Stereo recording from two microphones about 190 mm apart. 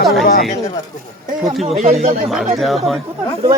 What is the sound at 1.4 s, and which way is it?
Speech, centre (ahead or behind).